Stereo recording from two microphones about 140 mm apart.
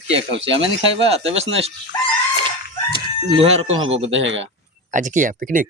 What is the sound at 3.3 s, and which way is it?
Speech, 40° right (ahead or behind).